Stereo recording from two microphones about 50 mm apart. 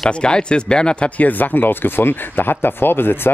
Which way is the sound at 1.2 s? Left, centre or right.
Left.